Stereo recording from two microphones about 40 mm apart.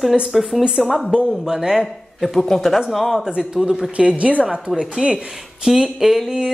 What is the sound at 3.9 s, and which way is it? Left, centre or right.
Speech, right.